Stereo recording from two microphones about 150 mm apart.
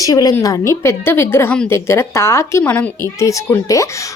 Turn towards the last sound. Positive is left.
turn(degrees=20)  # may be behind; listen again after turning